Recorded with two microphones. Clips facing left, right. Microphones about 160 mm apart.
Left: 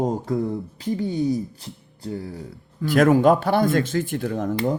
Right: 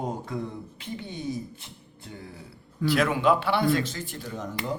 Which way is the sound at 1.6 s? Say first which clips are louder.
Left 10 dB; 35° left (ahead or behind).